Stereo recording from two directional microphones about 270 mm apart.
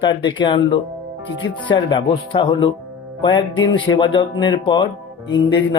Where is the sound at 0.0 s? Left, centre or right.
Centre.